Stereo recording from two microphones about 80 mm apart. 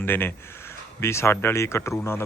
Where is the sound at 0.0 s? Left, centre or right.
Left.